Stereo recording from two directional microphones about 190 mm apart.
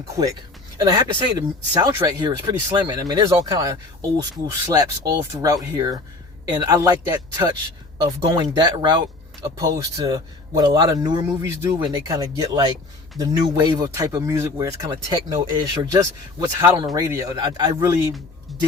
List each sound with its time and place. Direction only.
0.8 s speech: 20° right (ahead or behind)